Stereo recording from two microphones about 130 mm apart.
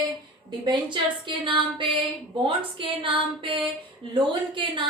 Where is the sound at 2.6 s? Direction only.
40° right (ahead or behind).